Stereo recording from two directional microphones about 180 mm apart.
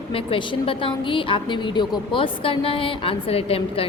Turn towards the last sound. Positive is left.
turn(degrees=30)  # may be behind; listen again after turning